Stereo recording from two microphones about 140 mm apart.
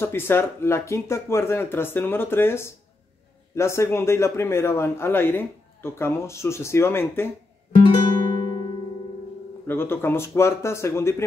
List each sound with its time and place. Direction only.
0.0 s speech: 15° left (ahead or behind)
7.7 s music: 35° left (ahead or behind)
9.7 s speech: 15° left (ahead or behind)